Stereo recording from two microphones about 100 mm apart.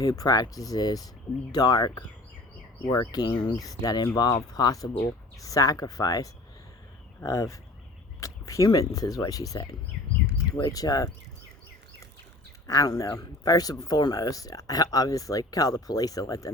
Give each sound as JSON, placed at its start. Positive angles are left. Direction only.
{"t": 0.0, "sound": "speech", "side_deg": 40}
{"t": 12.6, "sound": "speech", "side_deg": 35}